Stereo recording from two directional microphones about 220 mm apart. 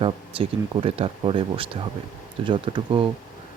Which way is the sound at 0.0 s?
25° right (ahead or behind).